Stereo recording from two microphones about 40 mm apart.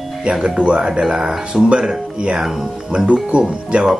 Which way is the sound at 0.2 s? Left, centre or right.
Right.